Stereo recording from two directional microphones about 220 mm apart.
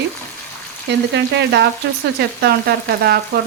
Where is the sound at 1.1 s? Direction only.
50° right (ahead or behind).